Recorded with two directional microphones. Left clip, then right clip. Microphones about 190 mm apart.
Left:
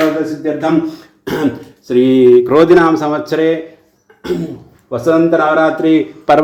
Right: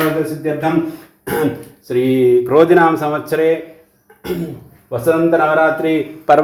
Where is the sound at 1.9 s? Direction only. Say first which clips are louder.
Left 5 dB; 30° left (ahead or behind).